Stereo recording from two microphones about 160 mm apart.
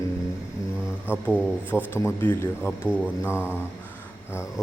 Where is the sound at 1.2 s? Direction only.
10° left (ahead or behind).